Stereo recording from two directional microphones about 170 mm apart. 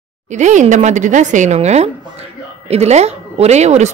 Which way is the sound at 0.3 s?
45° right (ahead or behind).